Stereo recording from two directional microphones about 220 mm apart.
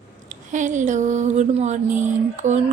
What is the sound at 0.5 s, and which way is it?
Speech, 35° right (ahead or behind).